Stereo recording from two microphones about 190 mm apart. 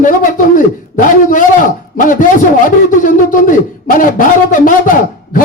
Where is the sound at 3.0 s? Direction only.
45° left (ahead or behind).